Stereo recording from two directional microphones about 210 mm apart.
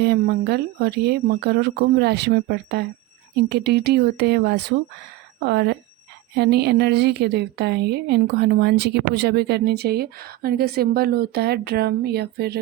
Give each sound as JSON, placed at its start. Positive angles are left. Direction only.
{"t": 0.0, "sound": "a woman's voice", "side_deg": -50}